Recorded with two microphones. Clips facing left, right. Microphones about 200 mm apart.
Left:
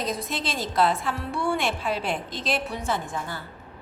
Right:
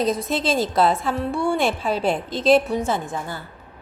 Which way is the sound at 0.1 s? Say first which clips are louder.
Right 8 dB; 25° right (ahead or behind).